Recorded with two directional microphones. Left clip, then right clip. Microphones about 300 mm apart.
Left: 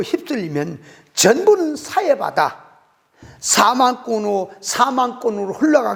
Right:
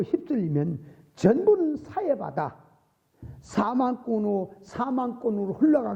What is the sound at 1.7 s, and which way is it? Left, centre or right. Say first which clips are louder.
A man's voice: left 10 dB; centre.